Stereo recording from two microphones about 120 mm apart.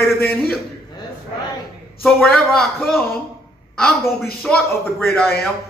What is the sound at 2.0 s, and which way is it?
A man's voice, 5° left (ahead or behind).